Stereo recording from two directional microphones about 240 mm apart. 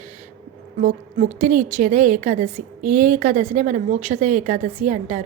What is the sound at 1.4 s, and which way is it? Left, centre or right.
A woman's voice, right.